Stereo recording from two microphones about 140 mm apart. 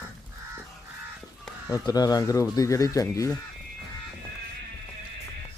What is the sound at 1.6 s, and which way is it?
Speech, 25° left (ahead or behind).